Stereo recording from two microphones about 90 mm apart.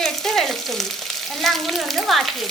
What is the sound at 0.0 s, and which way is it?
Frying, 5° left (ahead or behind).